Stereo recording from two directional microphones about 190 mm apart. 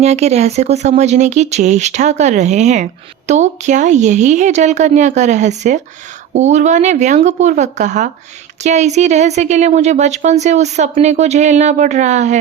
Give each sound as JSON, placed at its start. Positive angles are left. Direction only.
{"t": 0.0, "sound": "a woman's voice", "side_deg": -35}